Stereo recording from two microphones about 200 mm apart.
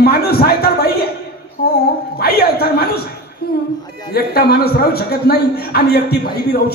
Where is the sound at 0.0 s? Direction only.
50° left (ahead or behind).